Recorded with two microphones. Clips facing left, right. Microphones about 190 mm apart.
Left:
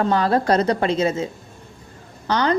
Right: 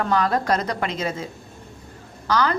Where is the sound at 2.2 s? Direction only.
30° left (ahead or behind).